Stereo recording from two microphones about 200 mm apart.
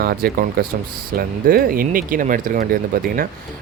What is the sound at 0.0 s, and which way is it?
Speech, 50° right (ahead or behind).